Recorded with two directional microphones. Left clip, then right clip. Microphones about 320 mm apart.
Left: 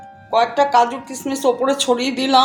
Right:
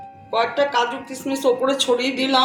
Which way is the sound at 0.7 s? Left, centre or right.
Left.